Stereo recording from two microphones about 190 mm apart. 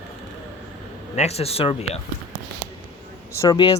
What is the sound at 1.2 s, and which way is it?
Speech, 35° left (ahead or behind).